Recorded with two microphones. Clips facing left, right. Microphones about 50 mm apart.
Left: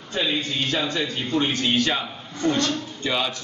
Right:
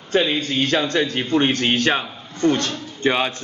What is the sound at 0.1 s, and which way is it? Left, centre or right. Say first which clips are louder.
A man's voice: right 6 dB; right.